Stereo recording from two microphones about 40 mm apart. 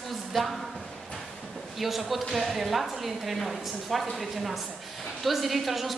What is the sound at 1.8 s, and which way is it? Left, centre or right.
Speech, centre.